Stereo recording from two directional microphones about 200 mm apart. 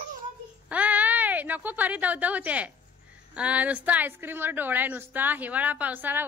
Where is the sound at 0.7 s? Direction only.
5° right (ahead or behind).